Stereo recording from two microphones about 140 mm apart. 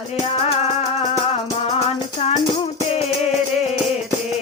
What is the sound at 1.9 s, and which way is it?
Music, 45° left (ahead or behind).